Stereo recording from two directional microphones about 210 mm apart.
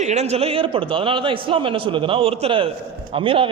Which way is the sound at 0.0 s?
35° right (ahead or behind).